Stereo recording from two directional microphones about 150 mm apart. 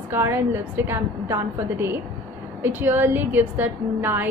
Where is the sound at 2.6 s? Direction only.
15° right (ahead or behind).